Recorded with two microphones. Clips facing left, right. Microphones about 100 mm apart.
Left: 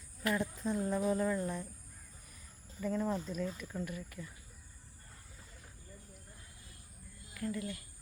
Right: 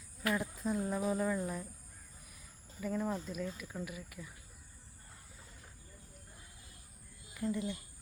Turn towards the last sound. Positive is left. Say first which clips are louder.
# right 2 dB
turn(degrees=-20)  # may be behind; listen again after turning